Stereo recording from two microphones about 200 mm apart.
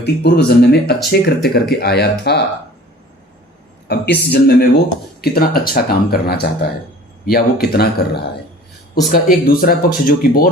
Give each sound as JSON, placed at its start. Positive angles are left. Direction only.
{"t": 0.0, "sound": "speech", "side_deg": 55}
{"t": 3.8, "sound": "speech", "side_deg": 55}